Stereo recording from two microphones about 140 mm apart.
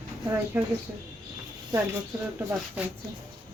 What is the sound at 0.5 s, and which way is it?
Speech, 15° right (ahead or behind).